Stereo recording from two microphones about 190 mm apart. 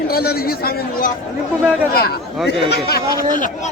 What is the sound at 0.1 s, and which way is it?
A man's voice, 55° left (ahead or behind).